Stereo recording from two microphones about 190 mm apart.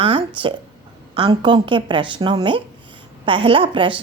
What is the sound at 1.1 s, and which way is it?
A woman's voice, 25° right (ahead or behind).